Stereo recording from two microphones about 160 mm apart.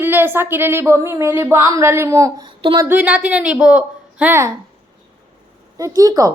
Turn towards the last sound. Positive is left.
turn(degrees=-20)  # may be behind; listen again after turning